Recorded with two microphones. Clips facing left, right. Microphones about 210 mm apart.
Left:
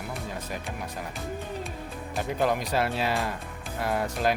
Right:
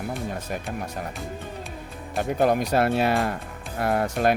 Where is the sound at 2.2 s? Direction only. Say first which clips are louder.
Right 5 dB; 50° right (ahead or behind).